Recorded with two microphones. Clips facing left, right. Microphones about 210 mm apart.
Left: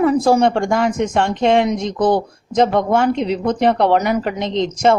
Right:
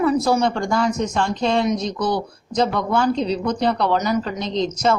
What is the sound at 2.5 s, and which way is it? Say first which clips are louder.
Speech: left 5 dB; 25° left (ahead or behind).